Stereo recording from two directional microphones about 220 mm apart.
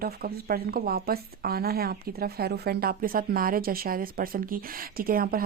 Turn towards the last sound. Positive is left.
turn(degrees=-40)  # may be behind; listen again after turning